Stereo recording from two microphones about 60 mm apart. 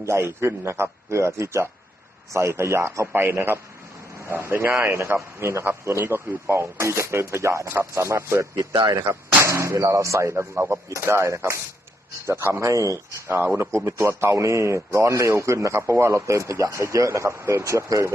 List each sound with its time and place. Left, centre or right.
0.0 s speech: right
3.2 s a man's voice: right
6.0 s speech: right
10.8 s a man's voice: right
12.7 s speech: right
13.2 s a man's voice: right
13.7 s a man's voice: right